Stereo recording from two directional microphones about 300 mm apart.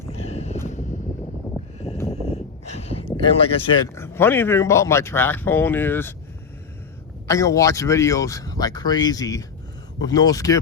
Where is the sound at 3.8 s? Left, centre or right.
Centre.